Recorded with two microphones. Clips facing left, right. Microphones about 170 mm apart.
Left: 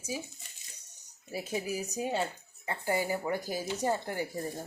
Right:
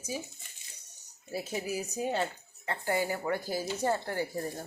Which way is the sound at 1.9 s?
10° left (ahead or behind).